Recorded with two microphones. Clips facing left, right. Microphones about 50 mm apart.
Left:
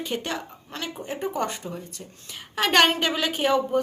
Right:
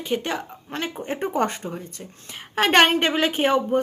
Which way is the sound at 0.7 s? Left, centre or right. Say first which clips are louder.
Right 4 dB; right.